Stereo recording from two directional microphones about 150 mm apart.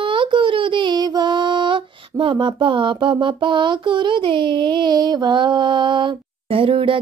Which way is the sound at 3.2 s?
30° right (ahead or behind).